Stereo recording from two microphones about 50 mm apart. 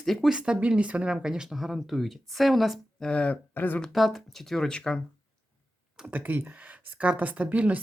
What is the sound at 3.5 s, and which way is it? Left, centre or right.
Speech, left.